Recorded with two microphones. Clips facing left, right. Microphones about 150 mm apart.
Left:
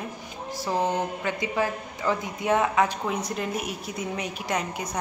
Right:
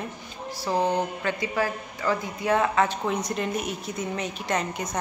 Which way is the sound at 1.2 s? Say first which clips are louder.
Even; 20° left (ahead or behind).